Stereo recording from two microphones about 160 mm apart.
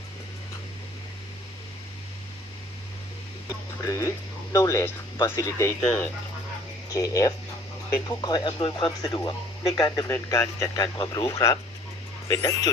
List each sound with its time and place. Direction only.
3.8 s speech: 20° left (ahead or behind)